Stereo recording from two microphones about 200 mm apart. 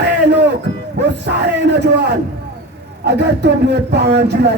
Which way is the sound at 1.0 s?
55° right (ahead or behind).